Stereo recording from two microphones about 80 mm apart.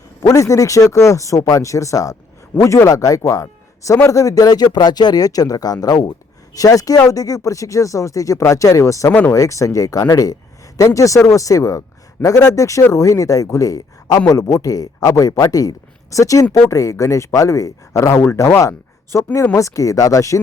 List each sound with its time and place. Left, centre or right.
0.2 s a man's voice: left
9.0 s speech: left
9.3 s a man's voice: left